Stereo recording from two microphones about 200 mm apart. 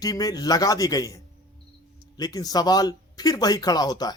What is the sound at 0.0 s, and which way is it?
A man's voice, 20° left (ahead or behind).